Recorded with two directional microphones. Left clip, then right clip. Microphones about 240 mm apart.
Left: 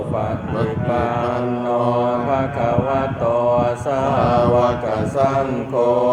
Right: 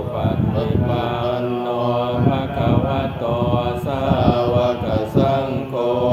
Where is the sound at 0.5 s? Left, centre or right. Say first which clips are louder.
Left 4 dB; left.